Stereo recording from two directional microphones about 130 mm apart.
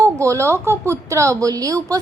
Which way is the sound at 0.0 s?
25° right (ahead or behind).